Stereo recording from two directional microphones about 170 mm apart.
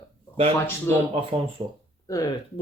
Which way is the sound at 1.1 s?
35° right (ahead or behind).